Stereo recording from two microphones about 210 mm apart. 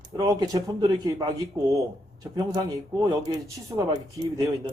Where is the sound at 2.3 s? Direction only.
20° right (ahead or behind).